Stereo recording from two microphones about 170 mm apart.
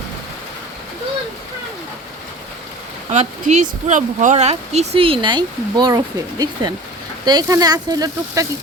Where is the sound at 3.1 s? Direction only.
45° right (ahead or behind).